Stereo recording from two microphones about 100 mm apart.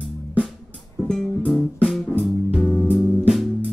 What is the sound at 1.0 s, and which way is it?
Music, 5° left (ahead or behind).